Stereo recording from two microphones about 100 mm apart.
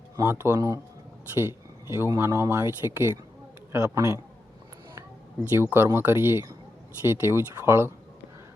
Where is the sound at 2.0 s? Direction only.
25° right (ahead or behind).